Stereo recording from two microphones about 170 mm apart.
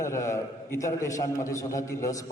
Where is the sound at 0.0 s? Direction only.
15° left (ahead or behind).